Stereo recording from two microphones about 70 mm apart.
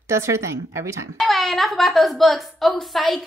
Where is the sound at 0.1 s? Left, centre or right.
Right.